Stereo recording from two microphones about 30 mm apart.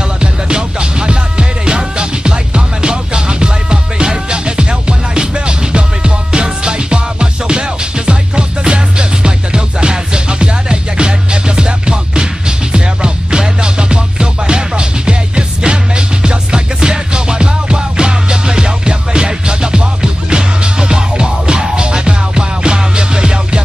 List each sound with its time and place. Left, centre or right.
0.2 s music: right